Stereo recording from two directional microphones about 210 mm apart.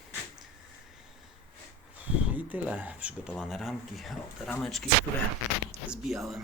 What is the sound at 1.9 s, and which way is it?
Speech, 10° right (ahead or behind).